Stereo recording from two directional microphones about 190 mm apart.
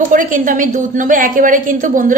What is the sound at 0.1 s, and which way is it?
A woman's voice, 45° right (ahead or behind).